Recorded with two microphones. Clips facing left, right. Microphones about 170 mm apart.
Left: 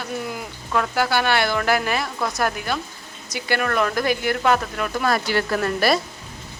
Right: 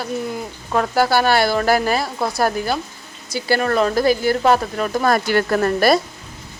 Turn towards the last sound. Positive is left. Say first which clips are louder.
# right 5 dB
turn(degrees=-45)  # may be behind; listen again after turning